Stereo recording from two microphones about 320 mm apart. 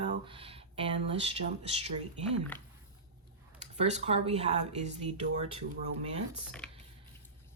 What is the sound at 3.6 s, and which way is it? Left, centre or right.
Speech, right.